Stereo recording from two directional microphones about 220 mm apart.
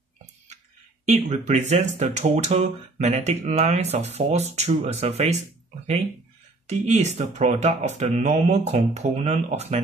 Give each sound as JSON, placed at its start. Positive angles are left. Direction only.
{"t": 1.0, "sound": "speech", "side_deg": -30}
{"t": 6.7, "sound": "speech", "side_deg": -30}